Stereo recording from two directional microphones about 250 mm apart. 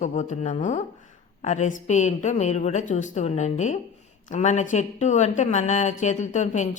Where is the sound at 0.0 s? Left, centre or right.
Left.